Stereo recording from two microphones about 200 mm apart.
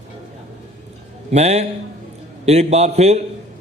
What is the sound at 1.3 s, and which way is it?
A man's voice, 35° right (ahead or behind).